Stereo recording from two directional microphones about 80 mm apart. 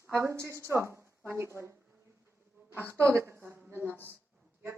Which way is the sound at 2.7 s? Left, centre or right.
Right.